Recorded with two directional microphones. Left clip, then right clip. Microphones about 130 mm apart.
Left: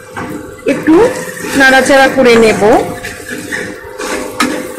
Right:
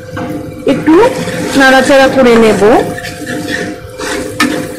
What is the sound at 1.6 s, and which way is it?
A woman's voice, 10° right (ahead or behind).